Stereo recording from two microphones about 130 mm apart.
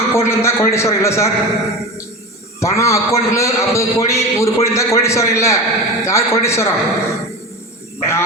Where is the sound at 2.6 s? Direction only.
25° left (ahead or behind).